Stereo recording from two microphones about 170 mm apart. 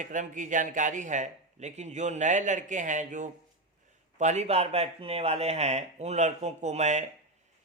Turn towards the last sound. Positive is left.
turn(degrees=-45)  # may be behind; listen again after turning